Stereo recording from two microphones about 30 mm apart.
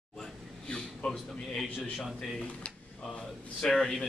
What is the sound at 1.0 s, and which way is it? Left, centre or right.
Speech, left.